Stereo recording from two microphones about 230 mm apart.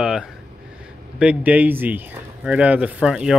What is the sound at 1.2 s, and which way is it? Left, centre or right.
Speech, centre.